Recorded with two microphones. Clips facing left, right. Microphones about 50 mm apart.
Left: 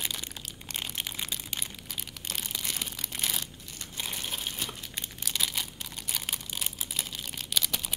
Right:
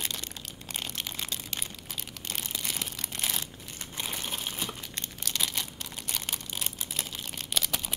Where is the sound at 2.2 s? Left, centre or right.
Centre.